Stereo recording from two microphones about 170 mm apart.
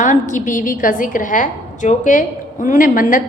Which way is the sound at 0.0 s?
50° left (ahead or behind).